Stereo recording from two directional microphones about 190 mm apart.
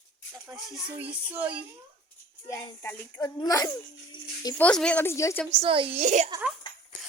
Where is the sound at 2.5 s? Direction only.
15° left (ahead or behind).